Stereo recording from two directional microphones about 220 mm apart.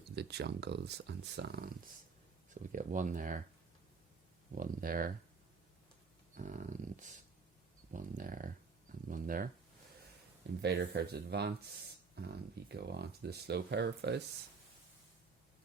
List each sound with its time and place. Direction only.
0.2 s speech: 50° right (ahead or behind)
4.5 s speech: 40° right (ahead or behind)
6.3 s speech: 35° right (ahead or behind)
10.6 s speech: 45° right (ahead or behind)